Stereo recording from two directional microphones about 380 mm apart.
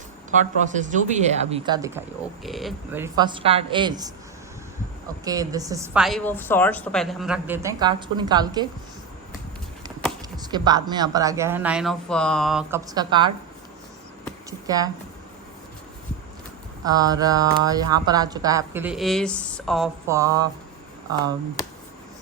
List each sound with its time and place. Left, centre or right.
0.3 s speech: centre
5.2 s a woman's voice: centre
10.3 s speech: centre
16.8 s speech: centre